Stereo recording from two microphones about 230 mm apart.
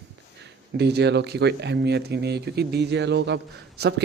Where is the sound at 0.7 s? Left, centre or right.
Right.